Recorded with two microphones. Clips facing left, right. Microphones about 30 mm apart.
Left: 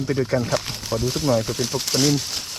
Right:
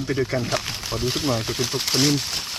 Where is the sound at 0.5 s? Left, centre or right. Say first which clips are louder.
Left 2 dB; right.